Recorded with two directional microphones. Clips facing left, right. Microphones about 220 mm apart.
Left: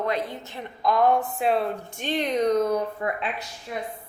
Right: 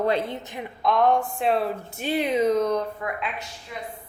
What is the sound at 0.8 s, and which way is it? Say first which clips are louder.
Speech: even; centre (ahead or behind).